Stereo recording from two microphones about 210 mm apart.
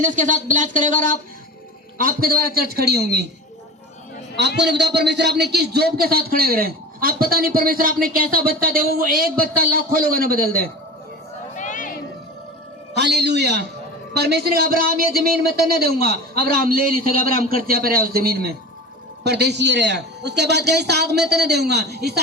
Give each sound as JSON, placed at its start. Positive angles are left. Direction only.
{"t": 0.0, "sound": "a man's voice", "side_deg": -35}
{"t": 4.4, "sound": "a man's voice", "side_deg": -55}
{"t": 11.5, "sound": "a sound", "side_deg": 35}
{"t": 12.9, "sound": "a man's voice", "side_deg": -55}